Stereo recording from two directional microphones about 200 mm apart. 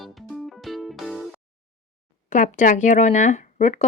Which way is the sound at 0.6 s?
Centre (ahead or behind).